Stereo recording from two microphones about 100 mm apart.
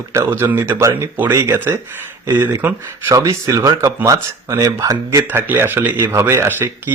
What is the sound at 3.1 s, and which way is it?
Speech, 35° right (ahead or behind).